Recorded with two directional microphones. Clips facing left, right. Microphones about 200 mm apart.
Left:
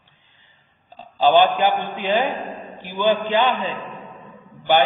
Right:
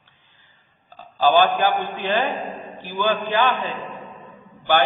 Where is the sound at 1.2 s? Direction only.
20° left (ahead or behind).